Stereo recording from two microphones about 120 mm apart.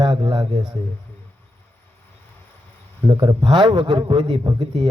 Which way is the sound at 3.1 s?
40° right (ahead or behind).